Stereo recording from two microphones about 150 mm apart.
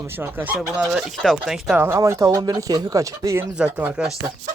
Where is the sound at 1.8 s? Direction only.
20° right (ahead or behind).